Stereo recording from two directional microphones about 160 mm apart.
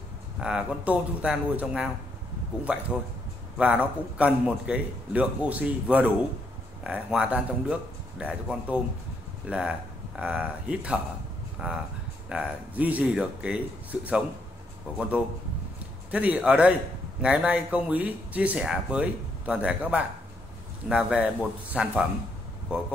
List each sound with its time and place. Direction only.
0.4 s a man's voice: 5° right (ahead or behind)